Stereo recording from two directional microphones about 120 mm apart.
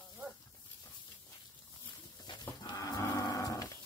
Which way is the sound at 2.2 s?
35° left (ahead or behind).